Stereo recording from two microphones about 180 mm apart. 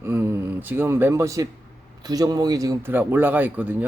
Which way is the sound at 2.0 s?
20° right (ahead or behind).